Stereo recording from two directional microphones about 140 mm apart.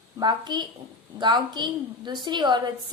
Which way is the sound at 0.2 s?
30° right (ahead or behind).